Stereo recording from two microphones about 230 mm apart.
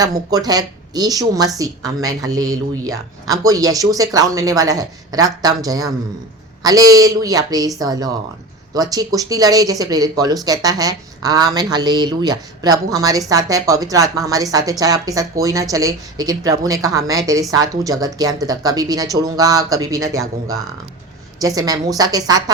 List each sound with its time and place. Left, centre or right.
0.0 s a woman's voice: centre
21.4 s a woman's voice: centre